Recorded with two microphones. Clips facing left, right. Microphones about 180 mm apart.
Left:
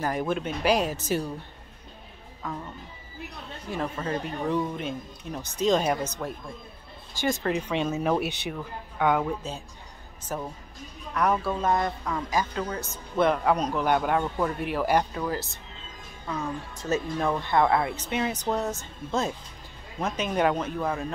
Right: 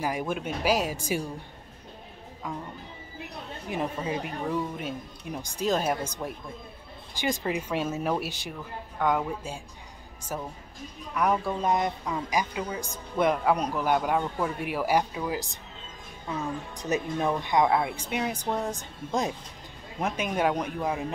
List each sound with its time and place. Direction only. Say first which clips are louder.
0.0 s a man's voice: left 2 dB; 10° right (ahead or behind)
2.4 s a man's voice: left 1 dB; 10° right (ahead or behind)
3.7 s a man's voice: even; 15° right (ahead or behind)
7.5 s speech: left 2 dB; 5° right (ahead or behind)
10.3 s a man's voice: left 2 dB; 5° right (ahead or behind)
16.7 s a man's voice: left 1 dB; 15° right (ahead or behind)